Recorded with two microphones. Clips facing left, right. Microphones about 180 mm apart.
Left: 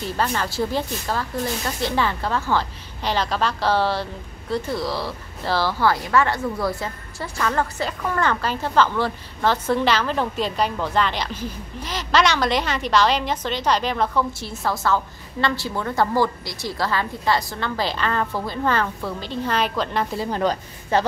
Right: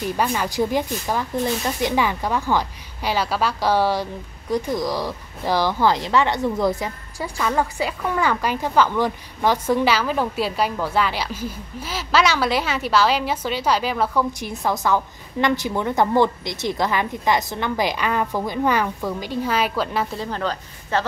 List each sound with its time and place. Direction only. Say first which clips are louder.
0.0 s speech: right 2 dB; 10° right (ahead or behind)
20.2 s speech: left 3 dB; 15° left (ahead or behind)